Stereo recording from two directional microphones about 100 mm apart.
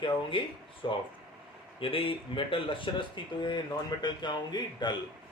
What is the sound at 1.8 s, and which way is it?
Speech, 65° left (ahead or behind).